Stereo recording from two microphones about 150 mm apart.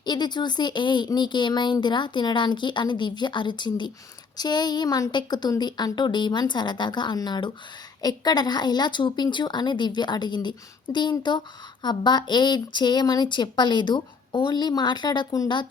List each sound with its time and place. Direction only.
0.0 s speech: 30° left (ahead or behind)